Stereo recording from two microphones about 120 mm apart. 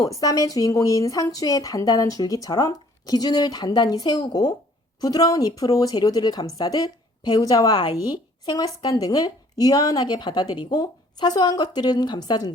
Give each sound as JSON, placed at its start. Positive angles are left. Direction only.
{"t": 0.0, "sound": "speech", "side_deg": 30}